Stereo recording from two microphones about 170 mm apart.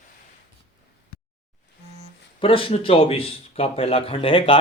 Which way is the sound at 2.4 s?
30° left (ahead or behind).